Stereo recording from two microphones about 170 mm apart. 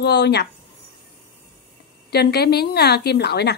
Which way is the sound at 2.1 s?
70° left (ahead or behind).